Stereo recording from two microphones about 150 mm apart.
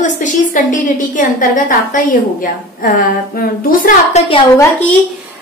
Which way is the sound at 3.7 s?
70° left (ahead or behind).